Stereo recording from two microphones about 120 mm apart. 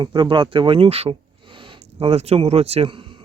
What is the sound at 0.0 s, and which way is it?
Speech, 40° right (ahead or behind).